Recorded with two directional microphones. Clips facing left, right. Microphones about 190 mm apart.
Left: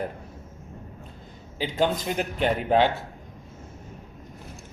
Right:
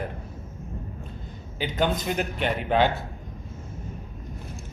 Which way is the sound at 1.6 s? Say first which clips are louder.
Left 1 dB; 30° left (ahead or behind).